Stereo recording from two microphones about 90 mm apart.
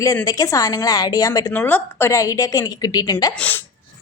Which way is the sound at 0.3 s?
40° left (ahead or behind).